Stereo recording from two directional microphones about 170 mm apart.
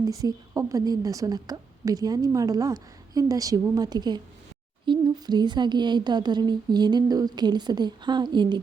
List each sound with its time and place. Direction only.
0.0 s a woman's voice: 20° right (ahead or behind)